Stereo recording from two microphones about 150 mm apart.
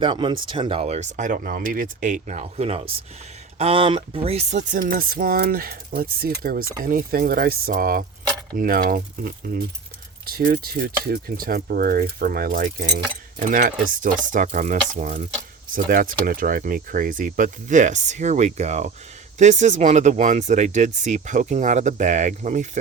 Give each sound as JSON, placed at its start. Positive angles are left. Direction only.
{"t": 0.0, "sound": "speech", "side_deg": -30}
{"t": 4.7, "sound": "speech", "side_deg": -70}
{"t": 10.2, "sound": "speech", "side_deg": -90}
{"t": 13.4, "sound": "speech", "side_deg": -60}
{"t": 15.7, "sound": "speech", "side_deg": -70}